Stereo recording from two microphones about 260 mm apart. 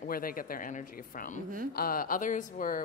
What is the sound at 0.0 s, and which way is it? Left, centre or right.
A woman's voice, left.